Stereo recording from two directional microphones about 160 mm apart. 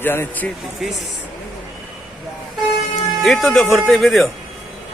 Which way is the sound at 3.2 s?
Centre (ahead or behind).